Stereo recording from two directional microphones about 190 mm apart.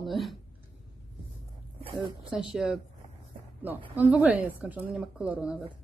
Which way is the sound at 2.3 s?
5° right (ahead or behind).